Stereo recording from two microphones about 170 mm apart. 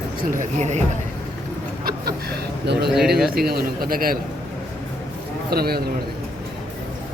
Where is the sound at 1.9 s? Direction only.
70° right (ahead or behind).